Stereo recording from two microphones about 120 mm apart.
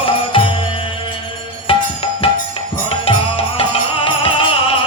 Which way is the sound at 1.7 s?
50° left (ahead or behind).